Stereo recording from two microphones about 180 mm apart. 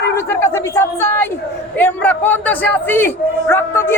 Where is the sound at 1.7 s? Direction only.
10° left (ahead or behind).